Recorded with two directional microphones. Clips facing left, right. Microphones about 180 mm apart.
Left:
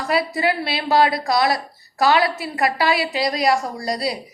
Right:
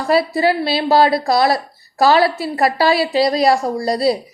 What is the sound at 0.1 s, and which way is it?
A woman's voice, 30° right (ahead or behind).